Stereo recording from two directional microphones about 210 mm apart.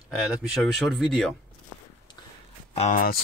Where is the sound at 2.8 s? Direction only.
40° left (ahead or behind).